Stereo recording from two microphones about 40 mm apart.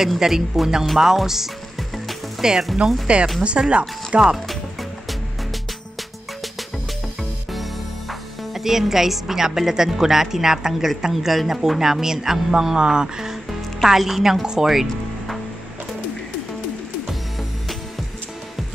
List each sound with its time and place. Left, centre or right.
0.2 s a man's voice: centre
3.1 s speech: right
8.1 s a woman's voice: centre
12.7 s a man's voice: centre
14.7 s music: centre